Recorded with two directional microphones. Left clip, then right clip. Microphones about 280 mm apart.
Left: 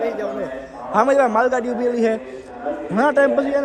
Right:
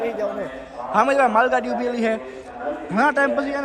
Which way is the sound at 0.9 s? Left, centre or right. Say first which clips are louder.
Left 2 dB; centre.